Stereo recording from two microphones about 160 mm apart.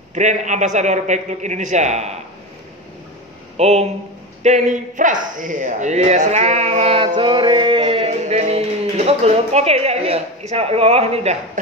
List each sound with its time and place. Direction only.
0.1 s speech: 50° right (ahead or behind)
3.5 s speech: 40° right (ahead or behind)
7.2 s music: 30° right (ahead or behind)